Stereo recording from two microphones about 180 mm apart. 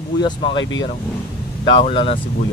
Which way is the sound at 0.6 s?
90° left.